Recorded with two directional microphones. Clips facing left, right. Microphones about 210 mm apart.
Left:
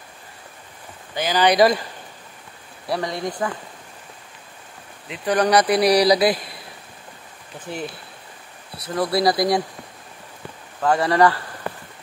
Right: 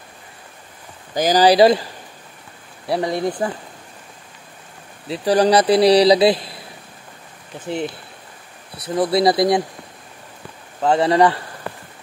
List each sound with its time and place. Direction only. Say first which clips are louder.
1.1 s speech: right 5 dB; 40° right (ahead or behind)
2.9 s a man's voice: right 5 dB; 25° right (ahead or behind)
5.0 s a man's voice: right 4 dB; 35° right (ahead or behind)
8.8 s a man's voice: right 3 dB; 20° right (ahead or behind)
10.8 s a man's voice: right 2 dB; 25° right (ahead or behind)